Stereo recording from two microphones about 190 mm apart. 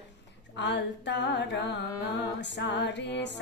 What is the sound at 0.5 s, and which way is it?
Music, 70° left (ahead or behind).